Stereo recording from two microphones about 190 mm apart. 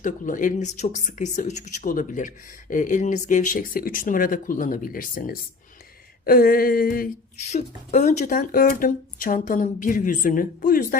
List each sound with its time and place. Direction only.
0.0 s speech: 45° left (ahead or behind)
7.9 s speech: 35° left (ahead or behind)